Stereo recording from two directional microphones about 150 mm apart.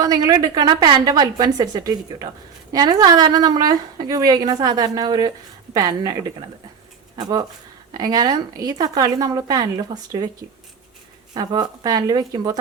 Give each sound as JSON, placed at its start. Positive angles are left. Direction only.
{"t": 0.0, "sound": "a woman's voice", "side_deg": -25}
{"t": 7.2, "sound": "a woman's voice", "side_deg": -25}
{"t": 11.3, "sound": "a woman's voice", "side_deg": -25}